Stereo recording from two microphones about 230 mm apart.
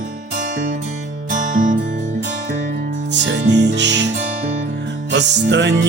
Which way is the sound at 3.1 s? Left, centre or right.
Right.